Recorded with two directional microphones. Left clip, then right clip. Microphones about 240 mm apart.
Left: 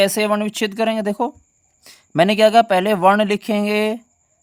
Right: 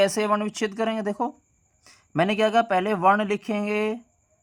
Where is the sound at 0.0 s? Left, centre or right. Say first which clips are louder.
Left 5 dB; left.